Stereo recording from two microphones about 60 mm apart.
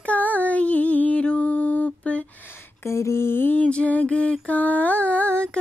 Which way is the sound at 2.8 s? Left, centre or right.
Left.